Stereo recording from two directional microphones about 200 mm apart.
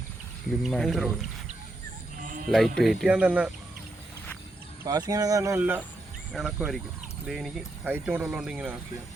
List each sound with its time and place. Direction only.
0.6 s speech: centre (ahead or behind)
2.5 s speech: centre (ahead or behind)
4.8 s speech: 20° right (ahead or behind)